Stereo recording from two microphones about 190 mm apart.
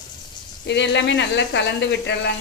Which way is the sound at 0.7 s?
65° left (ahead or behind).